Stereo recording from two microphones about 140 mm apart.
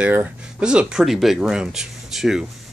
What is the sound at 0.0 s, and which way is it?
Speech, 10° right (ahead or behind).